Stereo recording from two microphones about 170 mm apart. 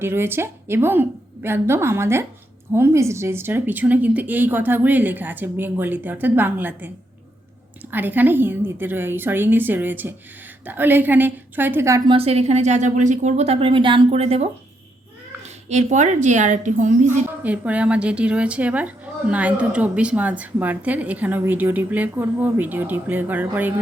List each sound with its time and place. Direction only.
0.0 s a woman's voice: 15° right (ahead or behind)
12.1 s a woman's voice: 35° right (ahead or behind)
17.1 s a woman's voice: 10° right (ahead or behind)